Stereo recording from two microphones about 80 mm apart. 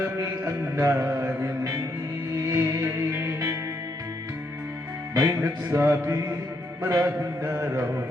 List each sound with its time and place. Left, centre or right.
0.8 s music: right
2.8 s music: right
5.1 s music: right
5.4 s mantra: right